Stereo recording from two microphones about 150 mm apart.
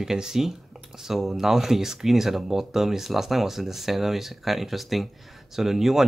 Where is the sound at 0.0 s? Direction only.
5° right (ahead or behind).